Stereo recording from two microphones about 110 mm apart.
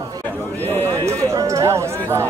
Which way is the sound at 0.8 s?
25° right (ahead or behind).